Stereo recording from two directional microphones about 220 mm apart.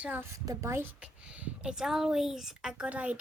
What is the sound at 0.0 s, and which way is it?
Speech, 10° right (ahead or behind).